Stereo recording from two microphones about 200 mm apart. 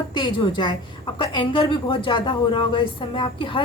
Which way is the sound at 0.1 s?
25° left (ahead or behind).